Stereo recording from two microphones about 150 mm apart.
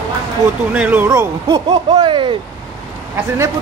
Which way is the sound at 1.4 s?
30° right (ahead or behind).